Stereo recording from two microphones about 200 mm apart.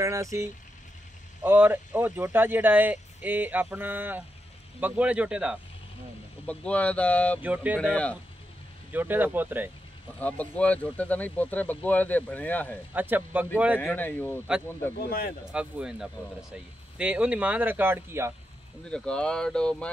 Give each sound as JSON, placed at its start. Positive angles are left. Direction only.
{"t": 0.0, "sound": "speech", "side_deg": -15}
{"t": 6.4, "sound": "speech", "side_deg": 5}
{"t": 7.4, "sound": "speech", "side_deg": -5}
{"t": 7.9, "sound": "speech", "side_deg": 5}
{"t": 8.9, "sound": "speech", "side_deg": -10}
{"t": 10.1, "sound": "speech", "side_deg": 10}
{"t": 12.9, "sound": "speech", "side_deg": -10}
{"t": 13.7, "sound": "speech", "side_deg": 10}
{"t": 15.0, "sound": "speech", "side_deg": 50}
{"t": 15.5, "sound": "speech", "side_deg": -5}
{"t": 18.9, "sound": "speech", "side_deg": 5}